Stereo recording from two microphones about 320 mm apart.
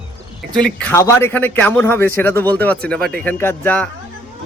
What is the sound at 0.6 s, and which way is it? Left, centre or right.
Speech, centre.